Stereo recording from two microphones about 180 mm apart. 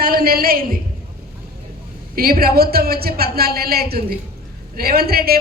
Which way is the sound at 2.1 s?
55° right (ahead or behind).